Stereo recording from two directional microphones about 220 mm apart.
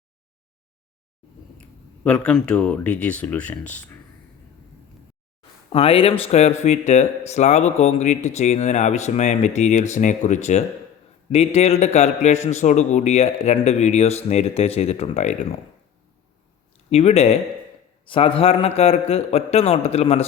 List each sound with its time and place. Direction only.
2.0 s speech: 5° left (ahead or behind)
5.7 s a man's voice: 25° left (ahead or behind)
16.9 s a man's voice: 30° left (ahead or behind)